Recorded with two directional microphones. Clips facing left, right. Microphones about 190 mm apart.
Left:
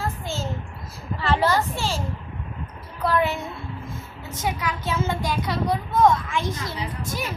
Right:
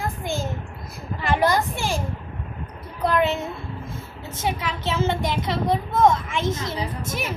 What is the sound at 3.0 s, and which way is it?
A child's voice, 20° right (ahead or behind).